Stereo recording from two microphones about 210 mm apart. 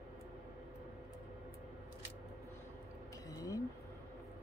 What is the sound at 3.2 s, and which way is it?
Vehicle, 15° left (ahead or behind).